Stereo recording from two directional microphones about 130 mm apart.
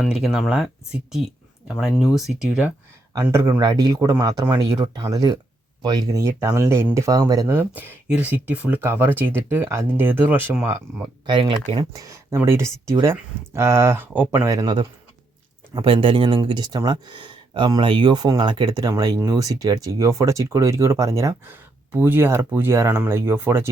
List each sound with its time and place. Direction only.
0.0 s speech: 5° right (ahead or behind)
1.8 s speech: 5° right (ahead or behind)
3.3 s speech: 20° right (ahead or behind)
11.3 s speech: 40° right (ahead or behind)
11.9 s speech: 25° right (ahead or behind)
15.7 s speech: 40° right (ahead or behind); by 23.6 s 20° right (ahead or behind)